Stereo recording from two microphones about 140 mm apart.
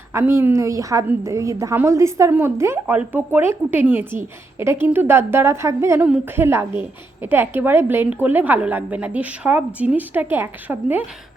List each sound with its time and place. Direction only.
0.1 s a woman's voice: 20° right (ahead or behind)